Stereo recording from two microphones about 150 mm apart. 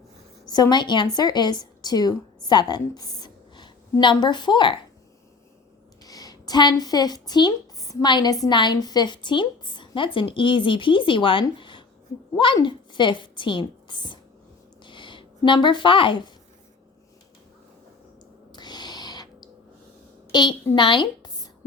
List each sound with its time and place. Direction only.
0.4 s a woman's voice: 25° left (ahead or behind)
6.1 s a woman's voice: 25° left (ahead or behind)
14.8 s a sound: 30° left (ahead or behind)
18.5 s owl: 30° left (ahead or behind)
20.3 s a woman's voice: 30° left (ahead or behind)